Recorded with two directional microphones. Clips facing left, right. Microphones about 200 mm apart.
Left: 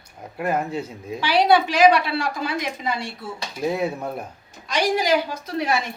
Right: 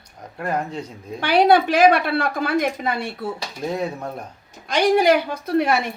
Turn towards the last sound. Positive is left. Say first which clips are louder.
# right 5 dB
turn(degrees=-60)  # may be behind; listen again after turning